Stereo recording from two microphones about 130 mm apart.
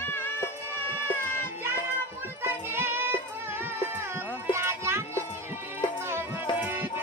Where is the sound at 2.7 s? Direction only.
20° right (ahead or behind).